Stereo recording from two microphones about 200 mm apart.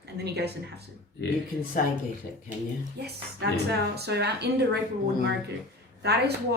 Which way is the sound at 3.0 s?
55° right (ahead or behind).